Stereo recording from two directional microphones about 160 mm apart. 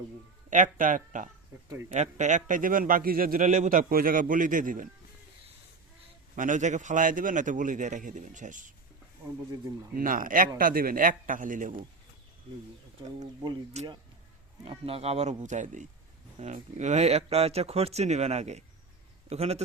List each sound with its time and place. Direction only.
0.5 s a man's voice: 55° right (ahead or behind)
6.3 s a man's voice: 55° right (ahead or behind)
9.9 s a man's voice: 60° right (ahead or behind)
13.7 s a man's voice: 45° right (ahead or behind)